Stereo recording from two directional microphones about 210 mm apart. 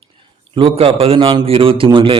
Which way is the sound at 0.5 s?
25° right (ahead or behind).